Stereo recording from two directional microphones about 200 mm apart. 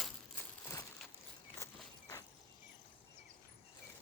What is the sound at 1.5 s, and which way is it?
Walk, 15° left (ahead or behind).